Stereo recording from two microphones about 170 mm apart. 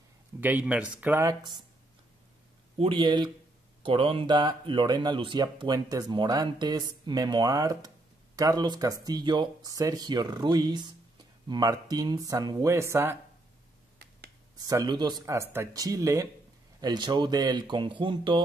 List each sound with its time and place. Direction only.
0.4 s speech: 10° right (ahead or behind)
2.8 s speech: 30° right (ahead or behind)
14.6 s speech: 20° right (ahead or behind)